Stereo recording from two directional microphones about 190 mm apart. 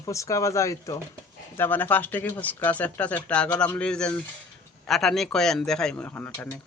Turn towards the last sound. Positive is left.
turn(degrees=10)  # may be behind; listen again after turning